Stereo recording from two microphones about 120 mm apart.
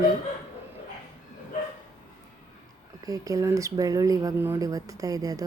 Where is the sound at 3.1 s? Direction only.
30° right (ahead or behind).